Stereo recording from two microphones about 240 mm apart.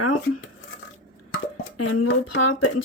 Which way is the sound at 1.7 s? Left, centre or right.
Left.